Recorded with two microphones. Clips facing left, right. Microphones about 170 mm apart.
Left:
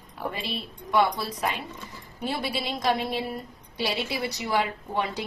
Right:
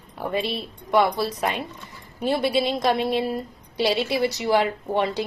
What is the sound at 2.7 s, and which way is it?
Speech, 25° right (ahead or behind).